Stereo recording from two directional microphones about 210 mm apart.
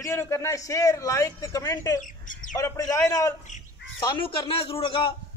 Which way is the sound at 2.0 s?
40° left (ahead or behind).